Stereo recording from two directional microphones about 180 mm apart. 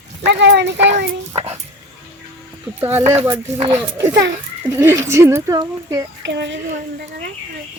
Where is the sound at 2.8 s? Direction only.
10° right (ahead or behind).